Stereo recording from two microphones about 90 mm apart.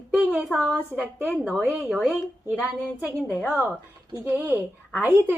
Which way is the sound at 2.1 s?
15° right (ahead or behind).